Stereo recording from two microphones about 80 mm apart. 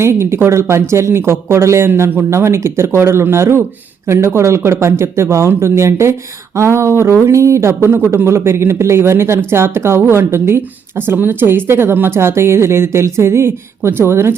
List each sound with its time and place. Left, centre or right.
0.0 s speech: right